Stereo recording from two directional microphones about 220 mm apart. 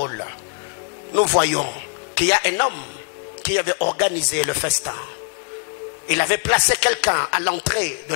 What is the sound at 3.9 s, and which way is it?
Speech, 10° left (ahead or behind).